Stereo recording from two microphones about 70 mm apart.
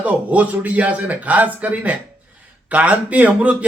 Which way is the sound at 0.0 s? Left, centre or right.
Right.